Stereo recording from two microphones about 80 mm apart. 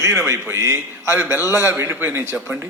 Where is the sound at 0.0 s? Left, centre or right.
Right.